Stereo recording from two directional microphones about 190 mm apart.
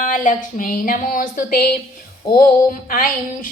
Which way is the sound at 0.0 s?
45° left (ahead or behind).